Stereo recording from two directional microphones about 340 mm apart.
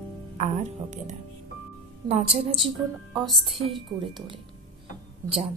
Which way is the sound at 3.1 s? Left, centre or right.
Centre.